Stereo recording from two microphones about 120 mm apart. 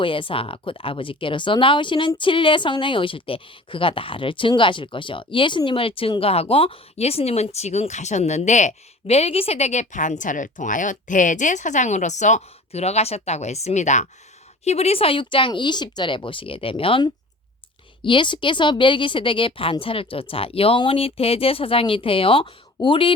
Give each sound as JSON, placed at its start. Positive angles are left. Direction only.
{"t": 0.0, "sound": "speech", "side_deg": 45}
{"t": 14.6, "sound": "speech", "side_deg": 60}